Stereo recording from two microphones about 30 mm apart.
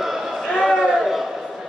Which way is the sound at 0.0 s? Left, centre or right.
Centre.